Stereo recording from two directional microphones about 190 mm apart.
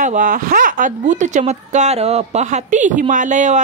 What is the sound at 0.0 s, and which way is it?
A woman's voice, 45° right (ahead or behind).